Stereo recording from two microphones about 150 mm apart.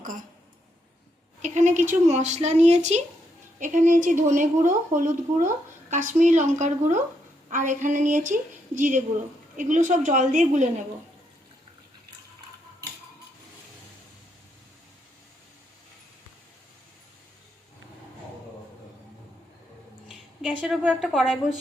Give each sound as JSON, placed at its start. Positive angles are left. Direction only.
{"t": 1.4, "sound": "a woman's voice", "side_deg": -55}
{"t": 20.1, "sound": "speech", "side_deg": -5}